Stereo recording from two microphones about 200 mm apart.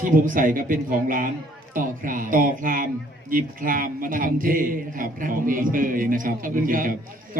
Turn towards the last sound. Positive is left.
turn(degrees=-45)  # may be behind; listen again after turning